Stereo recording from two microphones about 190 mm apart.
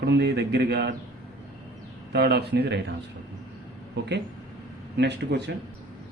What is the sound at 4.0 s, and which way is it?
A man's voice, 70° right (ahead or behind).